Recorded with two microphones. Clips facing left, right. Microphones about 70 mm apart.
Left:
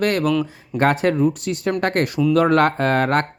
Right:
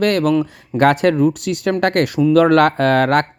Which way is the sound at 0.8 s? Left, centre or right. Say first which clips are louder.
Right 4 dB; right.